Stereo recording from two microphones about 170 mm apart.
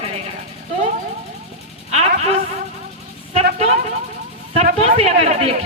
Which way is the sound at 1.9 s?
40° right (ahead or behind).